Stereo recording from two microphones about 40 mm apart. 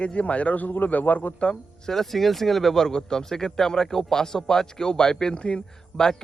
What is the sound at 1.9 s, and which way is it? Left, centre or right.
Speech, centre.